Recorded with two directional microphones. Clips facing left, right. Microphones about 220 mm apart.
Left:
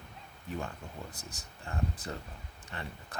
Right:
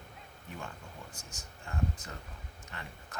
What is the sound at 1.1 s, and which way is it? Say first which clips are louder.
Speech: left 2 dB; 35° left (ahead or behind).